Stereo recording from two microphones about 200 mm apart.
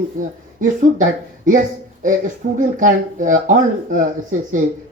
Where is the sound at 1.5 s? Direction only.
40° right (ahead or behind).